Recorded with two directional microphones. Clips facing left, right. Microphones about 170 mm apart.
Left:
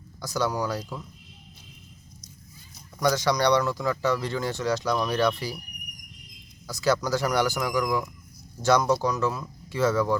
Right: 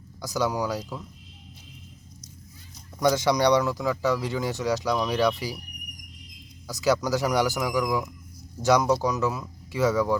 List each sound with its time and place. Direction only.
0.2 s speech: 15° right (ahead or behind)
3.0 s speech: 15° right (ahead or behind)
6.7 s speech: 15° right (ahead or behind)
9.2 s speech: 5° right (ahead or behind)
9.7 s speech: 15° right (ahead or behind)